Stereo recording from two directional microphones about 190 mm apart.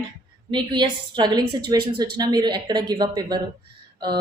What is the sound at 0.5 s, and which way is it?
A woman's voice, 25° right (ahead or behind).